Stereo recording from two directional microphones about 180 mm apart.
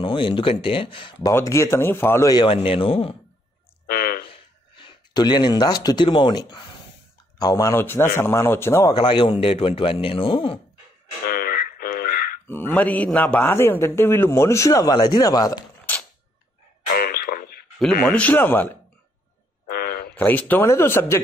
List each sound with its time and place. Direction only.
0.0 s speech: 30° left (ahead or behind)
1.3 s a man's voice: 15° left (ahead or behind); by 3.2 s 30° left (ahead or behind)
3.8 s a sound: 55° left (ahead or behind)
4.3 s a man's voice: 30° left (ahead or behind)
8.9 s speech: 30° left (ahead or behind)
11.2 s a sound: 55° left (ahead or behind)
12.4 s a man's voice: 10° left (ahead or behind)
15.8 s a sound: 10° left (ahead or behind)
16.9 s radio: 55° left (ahead or behind)
17.7 s a man's voice: 5° left (ahead or behind)
19.7 s a sound: 60° left (ahead or behind)
20.2 s a man's voice: 10° left (ahead or behind)